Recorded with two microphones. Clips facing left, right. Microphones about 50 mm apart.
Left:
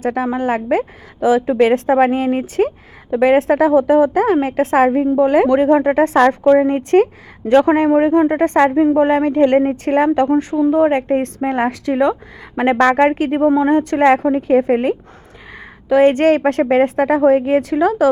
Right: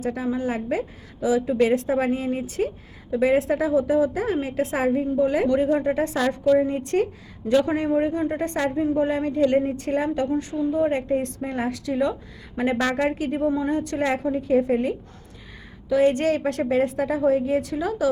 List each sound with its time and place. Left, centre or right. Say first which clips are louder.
0.0 s a woman's voice: left 7 dB; left